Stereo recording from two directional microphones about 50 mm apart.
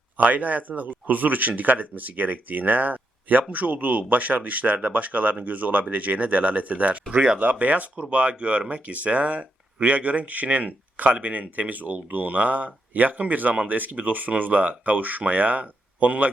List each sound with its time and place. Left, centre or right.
0.2 s speech: right